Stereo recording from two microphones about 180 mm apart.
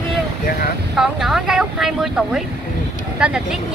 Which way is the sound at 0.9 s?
5° right (ahead or behind).